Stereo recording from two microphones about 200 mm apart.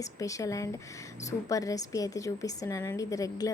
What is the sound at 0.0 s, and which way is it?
A woman's voice, 15° left (ahead or behind).